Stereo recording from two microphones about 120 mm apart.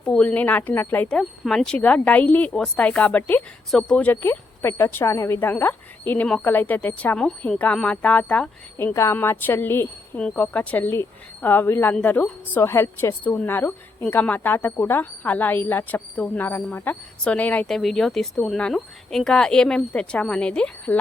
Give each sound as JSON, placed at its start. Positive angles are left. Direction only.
{"t": 0.0, "sound": "a woman's voice", "side_deg": 10}
{"t": 1.1, "sound": "a woman's voice", "side_deg": 5}